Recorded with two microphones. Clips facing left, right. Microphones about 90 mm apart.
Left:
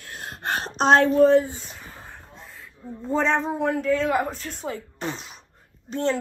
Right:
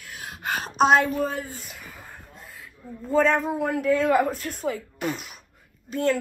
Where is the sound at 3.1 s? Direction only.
5° right (ahead or behind).